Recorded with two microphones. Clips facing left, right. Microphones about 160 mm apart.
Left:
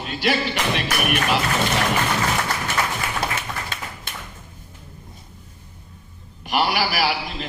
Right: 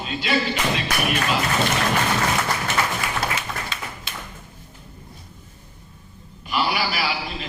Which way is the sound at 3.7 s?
50° left (ahead or behind).